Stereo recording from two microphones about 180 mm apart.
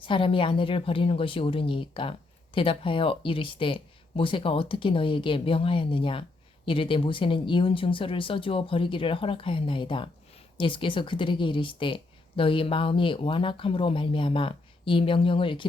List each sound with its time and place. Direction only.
0.0 s speech: 30° left (ahead or behind)